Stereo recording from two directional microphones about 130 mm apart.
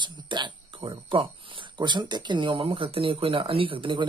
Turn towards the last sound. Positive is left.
turn(degrees=-40)  # may be behind; listen again after turning